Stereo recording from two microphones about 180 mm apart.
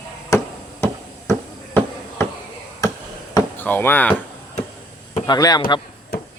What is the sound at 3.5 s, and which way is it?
Speech, 10° left (ahead or behind).